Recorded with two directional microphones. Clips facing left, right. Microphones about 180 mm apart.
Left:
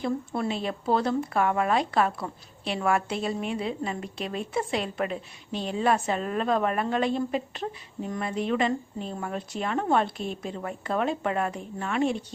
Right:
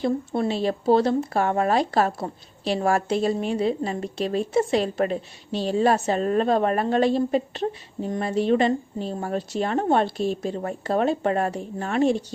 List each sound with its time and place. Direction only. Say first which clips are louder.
0.0 s speech: right 5 dB; 30° right (ahead or behind)